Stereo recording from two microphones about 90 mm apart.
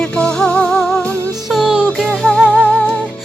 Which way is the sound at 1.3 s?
5° right (ahead or behind).